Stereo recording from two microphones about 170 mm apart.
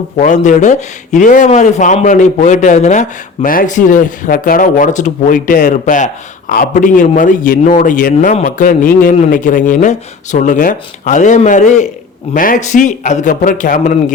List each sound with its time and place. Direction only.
0.2 s speech: 45° left (ahead or behind)